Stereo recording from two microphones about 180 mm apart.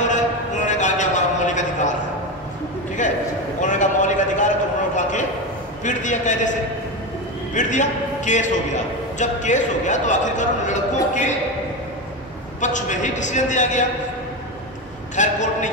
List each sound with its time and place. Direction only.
0.0 s a sound: 45° left (ahead or behind)
3.6 s a sound: 45° left (ahead or behind)
5.9 s a man's voice: 45° left (ahead or behind)
7.5 s a man's voice: 45° left (ahead or behind)
12.5 s a man's voice: 45° left (ahead or behind)
15.1 s a man's voice: 40° left (ahead or behind)